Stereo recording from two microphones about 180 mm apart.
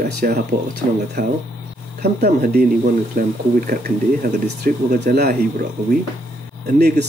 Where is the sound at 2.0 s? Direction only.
60° right (ahead or behind).